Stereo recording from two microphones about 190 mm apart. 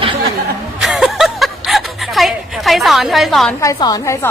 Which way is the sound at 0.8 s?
Centre (ahead or behind).